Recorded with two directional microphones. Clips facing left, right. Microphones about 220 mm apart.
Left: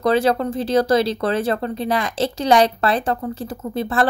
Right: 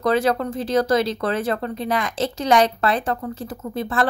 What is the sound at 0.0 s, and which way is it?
A woman's voice, 30° left (ahead or behind).